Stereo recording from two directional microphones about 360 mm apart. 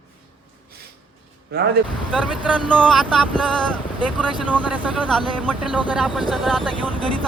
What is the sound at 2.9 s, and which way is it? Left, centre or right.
Speech, centre.